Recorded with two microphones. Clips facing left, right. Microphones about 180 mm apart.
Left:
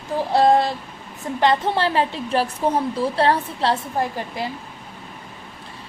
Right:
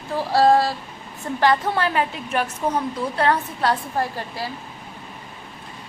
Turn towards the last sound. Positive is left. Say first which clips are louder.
# left 2 dB
turn(degrees=20)  # may be behind; listen again after turning